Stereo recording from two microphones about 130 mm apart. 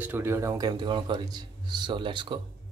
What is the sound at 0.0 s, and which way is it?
Speech, 15° right (ahead or behind).